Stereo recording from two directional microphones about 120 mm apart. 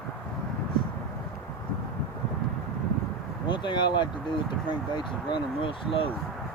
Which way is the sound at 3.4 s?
40° left (ahead or behind).